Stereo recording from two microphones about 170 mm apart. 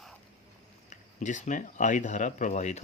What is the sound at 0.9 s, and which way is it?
Speech, 45° left (ahead or behind).